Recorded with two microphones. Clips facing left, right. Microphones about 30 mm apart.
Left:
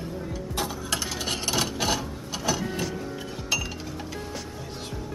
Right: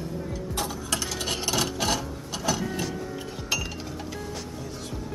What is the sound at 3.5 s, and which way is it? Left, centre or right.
Music, centre.